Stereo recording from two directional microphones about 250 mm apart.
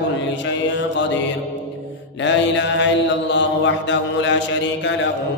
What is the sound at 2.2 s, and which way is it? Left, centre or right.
A man's voice, left.